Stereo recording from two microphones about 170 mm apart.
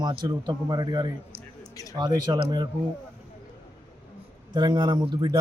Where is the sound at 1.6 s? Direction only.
20° left (ahead or behind).